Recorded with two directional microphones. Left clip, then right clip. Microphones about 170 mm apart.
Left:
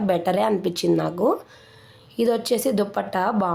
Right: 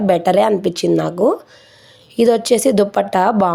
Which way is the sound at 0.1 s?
35° right (ahead or behind).